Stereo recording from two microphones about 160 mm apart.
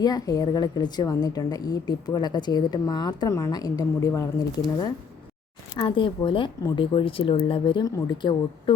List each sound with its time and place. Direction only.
0.0 s a woman's voice: 25° left (ahead or behind)